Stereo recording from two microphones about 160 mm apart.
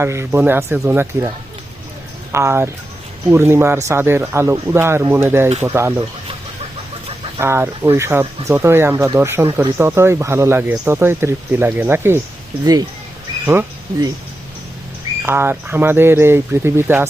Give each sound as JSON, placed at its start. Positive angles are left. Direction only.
{"t": 0.0, "sound": "speech", "side_deg": -15}
{"t": 2.3, "sound": "speech", "side_deg": -15}
{"t": 7.3, "sound": "speech", "side_deg": -15}
{"t": 13.4, "sound": "speech", "side_deg": -15}
{"t": 15.3, "sound": "speech", "side_deg": -15}